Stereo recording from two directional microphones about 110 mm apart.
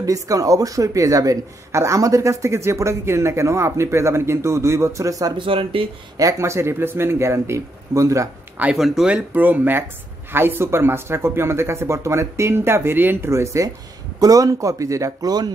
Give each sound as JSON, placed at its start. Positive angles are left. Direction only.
{"t": 0.0, "sound": "speech", "side_deg": -30}
{"t": 5.4, "sound": "speech", "side_deg": -50}
{"t": 6.1, "sound": "speech", "side_deg": -30}
{"t": 8.5, "sound": "speech", "side_deg": -10}